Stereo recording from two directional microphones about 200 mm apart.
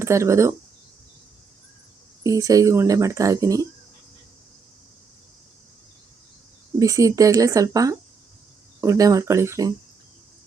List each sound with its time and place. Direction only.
0.0 s speech: 15° right (ahead or behind)
2.2 s speech: 15° right (ahead or behind)
6.7 s speech: 15° right (ahead or behind)